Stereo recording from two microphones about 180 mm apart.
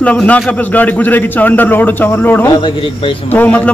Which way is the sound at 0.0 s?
5° left (ahead or behind).